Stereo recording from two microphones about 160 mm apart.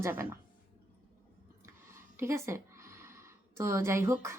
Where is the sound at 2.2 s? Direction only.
15° right (ahead or behind).